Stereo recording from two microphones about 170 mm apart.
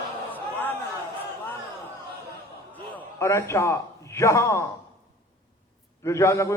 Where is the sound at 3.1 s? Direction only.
15° left (ahead or behind).